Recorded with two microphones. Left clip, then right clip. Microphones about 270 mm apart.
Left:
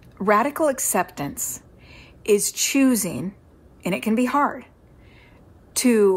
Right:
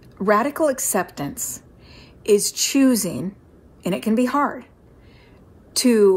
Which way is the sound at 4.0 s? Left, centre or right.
Centre.